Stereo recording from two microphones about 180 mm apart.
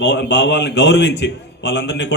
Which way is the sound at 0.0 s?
75° left (ahead or behind).